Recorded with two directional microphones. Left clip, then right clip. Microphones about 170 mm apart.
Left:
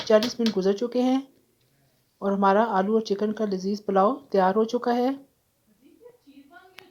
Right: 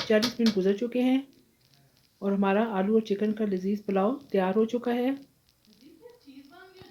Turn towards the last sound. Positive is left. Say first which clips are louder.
# left 4 dB
turn(degrees=45)  # may be behind; listen again after turning